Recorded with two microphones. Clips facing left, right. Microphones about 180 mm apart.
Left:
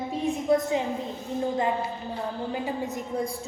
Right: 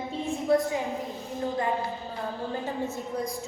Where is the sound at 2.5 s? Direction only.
15° left (ahead or behind).